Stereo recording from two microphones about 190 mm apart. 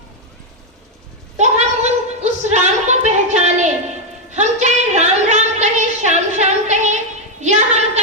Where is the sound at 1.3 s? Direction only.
35° right (ahead or behind).